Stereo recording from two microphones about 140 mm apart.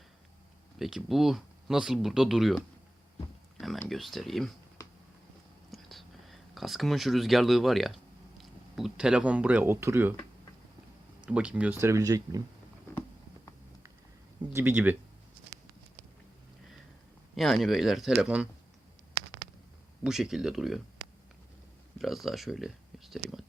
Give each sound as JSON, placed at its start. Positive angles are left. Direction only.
{"t": 0.8, "sound": "speech", "side_deg": 0}
{"t": 3.8, "sound": "speech", "side_deg": 0}
{"t": 5.7, "sound": "speech", "side_deg": 0}
{"t": 11.3, "sound": "speech", "side_deg": -10}
{"t": 14.5, "sound": "speech", "side_deg": -15}
{"t": 17.3, "sound": "speech", "side_deg": 0}
{"t": 20.1, "sound": "speech", "side_deg": -5}
{"t": 21.9, "sound": "speech", "side_deg": 0}